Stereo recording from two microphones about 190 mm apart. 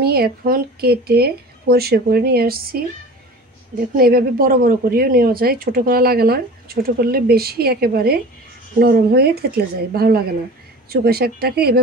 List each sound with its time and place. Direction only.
0.0 s speech: 55° right (ahead or behind)